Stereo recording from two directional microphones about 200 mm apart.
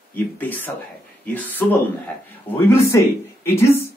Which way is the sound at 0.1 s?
10° left (ahead or behind).